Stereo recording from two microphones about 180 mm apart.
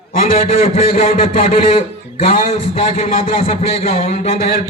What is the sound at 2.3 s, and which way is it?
Speech, 40° left (ahead or behind).